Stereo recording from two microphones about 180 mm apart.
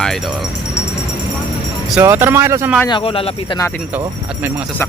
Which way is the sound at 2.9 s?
30° left (ahead or behind).